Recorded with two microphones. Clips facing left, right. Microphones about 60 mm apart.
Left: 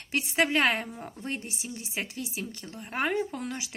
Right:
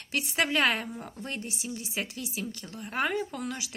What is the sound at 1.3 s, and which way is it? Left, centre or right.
Speech, left.